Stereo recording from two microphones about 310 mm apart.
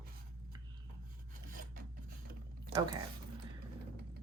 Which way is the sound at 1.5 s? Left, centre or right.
Right.